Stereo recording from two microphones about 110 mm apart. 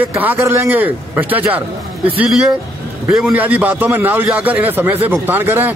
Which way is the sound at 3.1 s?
Centre (ahead or behind).